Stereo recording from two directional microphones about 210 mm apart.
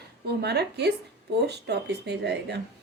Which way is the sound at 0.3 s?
50° right (ahead or behind).